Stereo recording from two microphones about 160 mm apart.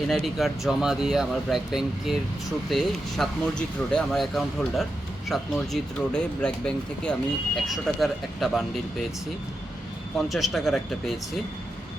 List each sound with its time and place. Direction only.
0.1 s speech: centre (ahead or behind)
10.2 s speech: centre (ahead or behind)